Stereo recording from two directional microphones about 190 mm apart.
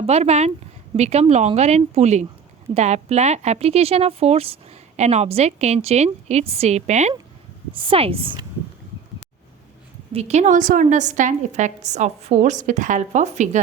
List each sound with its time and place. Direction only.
0.0 s a woman's voice: 35° right (ahead or behind)
10.1 s a woman's voice: 35° right (ahead or behind)